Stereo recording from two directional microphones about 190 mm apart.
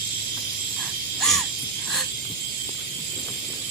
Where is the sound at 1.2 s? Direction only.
Centre (ahead or behind).